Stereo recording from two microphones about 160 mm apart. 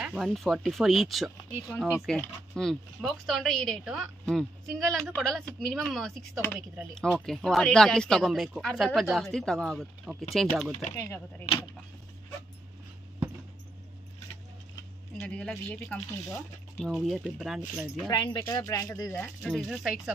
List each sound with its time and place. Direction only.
0.0 s speech: 5° right (ahead or behind)
11.0 s speech: 15° left (ahead or behind)
15.1 s speech: 5° left (ahead or behind)
18.0 s speech: 30° left (ahead or behind)
19.4 s speech: centre (ahead or behind)